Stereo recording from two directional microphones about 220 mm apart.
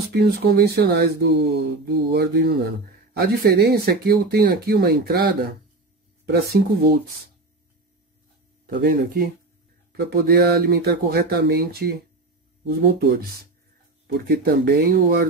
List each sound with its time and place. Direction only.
0.2 s speech: 45° right (ahead or behind)
8.6 s speech: 40° right (ahead or behind)
14.2 s speech: 45° right (ahead or behind)